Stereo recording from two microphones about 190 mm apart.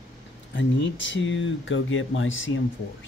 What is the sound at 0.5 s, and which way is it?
Speech, 75° left (ahead or behind).